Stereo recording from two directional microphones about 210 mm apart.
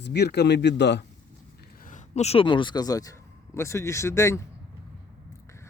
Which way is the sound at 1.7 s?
40° left (ahead or behind).